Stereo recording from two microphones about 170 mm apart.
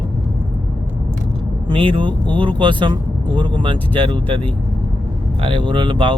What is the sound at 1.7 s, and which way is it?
Speech, 30° right (ahead or behind).